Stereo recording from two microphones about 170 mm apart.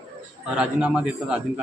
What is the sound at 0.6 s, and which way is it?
Speech, 5° right (ahead or behind).